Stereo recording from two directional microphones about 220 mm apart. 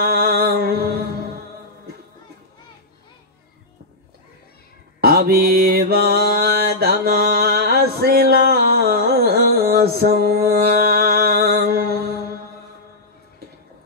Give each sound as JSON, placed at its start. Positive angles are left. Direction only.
{"t": 0.0, "sound": "music", "side_deg": -45}
{"t": 5.0, "sound": "mantra", "side_deg": -45}